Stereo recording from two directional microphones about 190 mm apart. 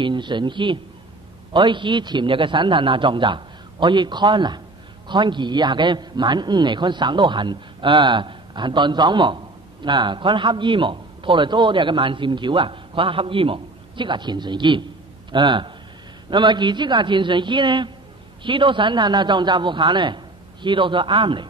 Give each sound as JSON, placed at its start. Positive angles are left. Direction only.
{"t": 0.0, "sound": "a man's voice", "side_deg": -25}